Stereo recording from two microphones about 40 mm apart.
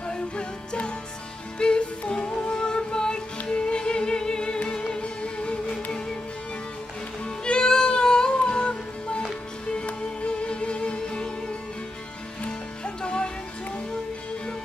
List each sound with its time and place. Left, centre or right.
0.0 s music: left
5.9 s music: centre
7.2 s music: left
12.4 s music: left